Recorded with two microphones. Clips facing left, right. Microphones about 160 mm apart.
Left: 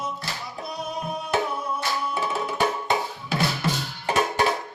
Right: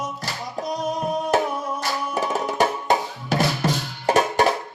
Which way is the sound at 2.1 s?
45° right (ahead or behind).